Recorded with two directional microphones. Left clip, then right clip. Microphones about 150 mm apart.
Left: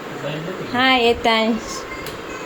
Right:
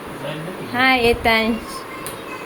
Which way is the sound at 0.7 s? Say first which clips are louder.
Even; 15° left (ahead or behind).